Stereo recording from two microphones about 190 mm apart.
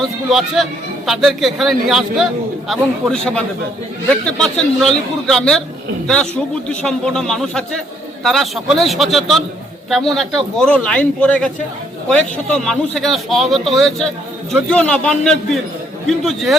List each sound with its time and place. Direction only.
0.0 s a man's voice: centre (ahead or behind)
6.7 s a man's voice: 5° left (ahead or behind)